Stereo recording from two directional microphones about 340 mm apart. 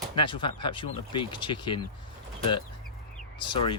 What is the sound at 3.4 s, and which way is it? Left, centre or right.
Speech, centre.